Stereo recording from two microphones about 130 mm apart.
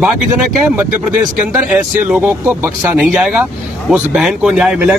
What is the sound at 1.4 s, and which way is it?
Speech, 10° right (ahead or behind).